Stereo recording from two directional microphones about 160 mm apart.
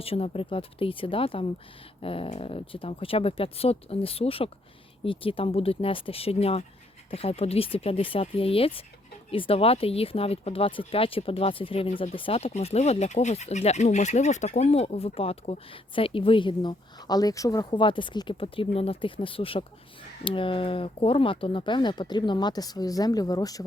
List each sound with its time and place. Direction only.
0.0 s speech: 35° left (ahead or behind)